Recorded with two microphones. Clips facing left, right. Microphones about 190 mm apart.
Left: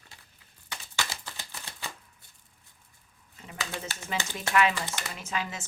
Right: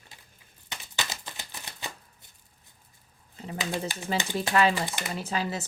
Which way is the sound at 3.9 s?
15° right (ahead or behind).